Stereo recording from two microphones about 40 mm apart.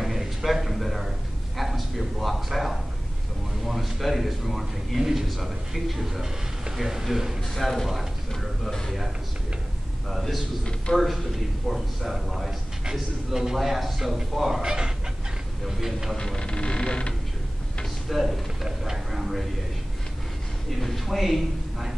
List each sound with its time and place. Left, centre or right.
0.0 s a sound: centre
3.6 s a man's voice: centre
7.5 s a man's voice: centre
10.0 s a man's voice: centre
14.6 s speech: centre
15.6 s a man's voice: centre
16.2 s speech: centre
18.0 s a sound: centre
20.8 s a man's voice: centre